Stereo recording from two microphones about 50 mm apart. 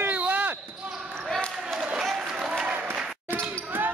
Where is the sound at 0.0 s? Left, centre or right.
Right.